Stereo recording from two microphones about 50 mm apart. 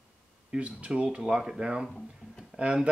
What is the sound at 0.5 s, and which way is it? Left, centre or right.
Speech, right.